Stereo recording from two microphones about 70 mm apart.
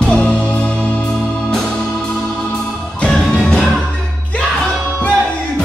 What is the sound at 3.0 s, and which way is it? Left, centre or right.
Music, centre.